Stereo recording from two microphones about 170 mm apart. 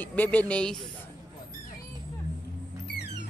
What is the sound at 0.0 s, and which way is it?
Speech, 10° left (ahead or behind).